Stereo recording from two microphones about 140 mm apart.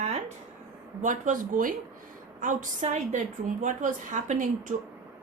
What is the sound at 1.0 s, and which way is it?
A woman's voice, 65° right (ahead or behind).